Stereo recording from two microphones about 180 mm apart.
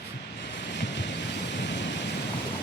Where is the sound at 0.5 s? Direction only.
75° left (ahead or behind).